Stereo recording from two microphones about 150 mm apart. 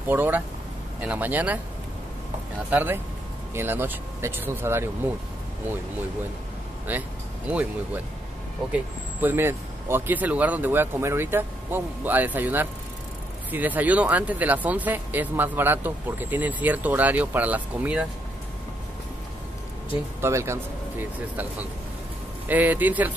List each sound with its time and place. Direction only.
0.1 s speech: 15° right (ahead or behind)
2.7 s speech: 10° right (ahead or behind)
6.9 s speech: 10° right (ahead or behind)
20.2 s speech: 20° right (ahead or behind)